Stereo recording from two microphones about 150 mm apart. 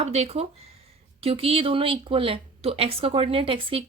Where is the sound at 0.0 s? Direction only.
45° right (ahead or behind).